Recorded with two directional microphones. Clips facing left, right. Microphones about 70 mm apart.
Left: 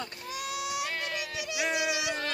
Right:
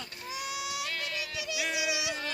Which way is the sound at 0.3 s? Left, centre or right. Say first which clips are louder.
Left 2 dB; centre.